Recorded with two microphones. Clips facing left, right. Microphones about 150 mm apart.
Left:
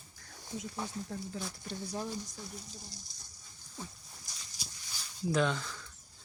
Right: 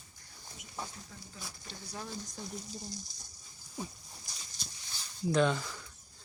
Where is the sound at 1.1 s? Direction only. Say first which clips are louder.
Left 10 dB; 55° left (ahead or behind).